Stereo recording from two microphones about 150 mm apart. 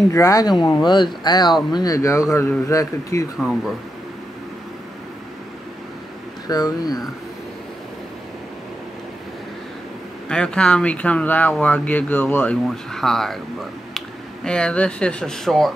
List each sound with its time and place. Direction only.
0.1 s speech: 20° left (ahead or behind)
3.3 s speech: centre (ahead or behind)
6.4 s speech: 25° left (ahead or behind)
10.2 s speech: 5° left (ahead or behind)